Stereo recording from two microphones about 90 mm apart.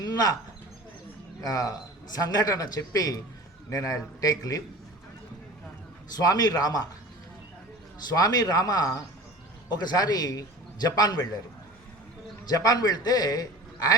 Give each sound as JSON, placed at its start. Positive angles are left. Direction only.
{"t": 0.0, "sound": "a sound", "side_deg": 45}
{"t": 1.4, "sound": "a man's voice", "side_deg": 45}
{"t": 6.1, "sound": "speech", "side_deg": 45}
{"t": 8.1, "sound": "a man's voice", "side_deg": 45}
{"t": 12.5, "sound": "a man's voice", "side_deg": 45}